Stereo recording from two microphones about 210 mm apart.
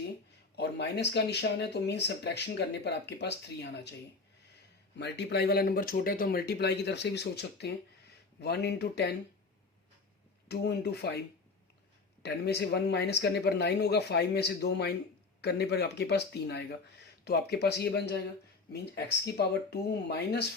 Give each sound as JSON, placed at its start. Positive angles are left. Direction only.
{"t": 0.5, "sound": "speech", "side_deg": 55}
{"t": 4.9, "sound": "speech", "side_deg": 55}
{"t": 10.5, "sound": "speech", "side_deg": 50}
{"t": 12.2, "sound": "speech", "side_deg": 50}